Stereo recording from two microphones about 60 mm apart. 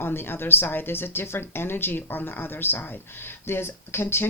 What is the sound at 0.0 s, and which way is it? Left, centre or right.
Speech, left.